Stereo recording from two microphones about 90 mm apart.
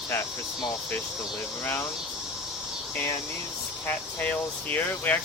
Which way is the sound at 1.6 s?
25° left (ahead or behind).